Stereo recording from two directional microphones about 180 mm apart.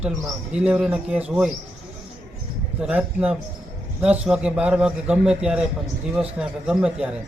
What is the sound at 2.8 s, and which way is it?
Speech, 5° right (ahead or behind).